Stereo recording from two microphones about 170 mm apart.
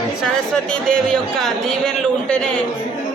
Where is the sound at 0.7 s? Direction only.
5° left (ahead or behind).